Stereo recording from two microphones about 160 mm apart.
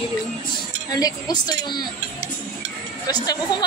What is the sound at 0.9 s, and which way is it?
A woman's voice, 25° left (ahead or behind).